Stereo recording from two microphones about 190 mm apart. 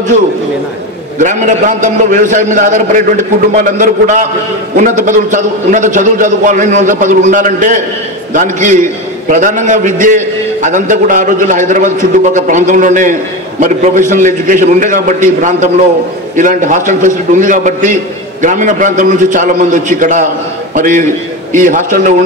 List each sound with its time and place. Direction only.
1.1 s a man's voice: 40° right (ahead or behind)